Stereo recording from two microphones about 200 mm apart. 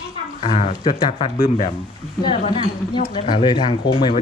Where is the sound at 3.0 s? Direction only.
35° left (ahead or behind).